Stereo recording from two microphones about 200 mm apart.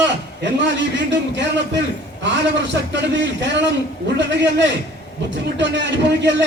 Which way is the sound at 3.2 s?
60° right (ahead or behind).